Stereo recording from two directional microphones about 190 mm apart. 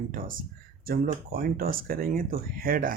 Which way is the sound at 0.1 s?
45° right (ahead or behind).